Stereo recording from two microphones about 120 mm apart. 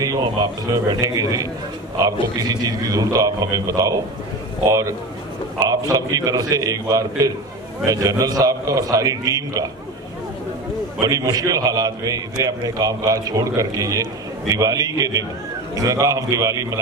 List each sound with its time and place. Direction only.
0.0 s a man's voice: 30° right (ahead or behind)
11.0 s a man's voice: 30° right (ahead or behind)